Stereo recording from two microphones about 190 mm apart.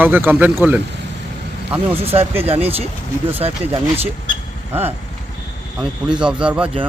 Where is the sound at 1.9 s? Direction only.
30° right (ahead or behind).